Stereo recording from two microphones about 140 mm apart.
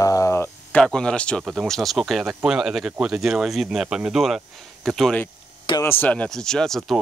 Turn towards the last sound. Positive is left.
turn(degrees=5)  # may be behind; listen again after turning